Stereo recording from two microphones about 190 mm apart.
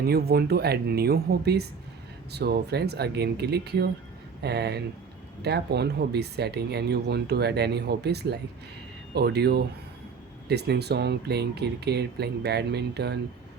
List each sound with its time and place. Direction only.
0.0 s speech: 55° right (ahead or behind)